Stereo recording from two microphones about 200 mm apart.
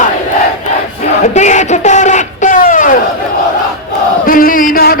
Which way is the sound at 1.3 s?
35° left (ahead or behind).